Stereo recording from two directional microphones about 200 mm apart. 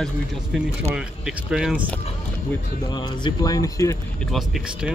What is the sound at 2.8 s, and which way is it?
Speech, 20° left (ahead or behind).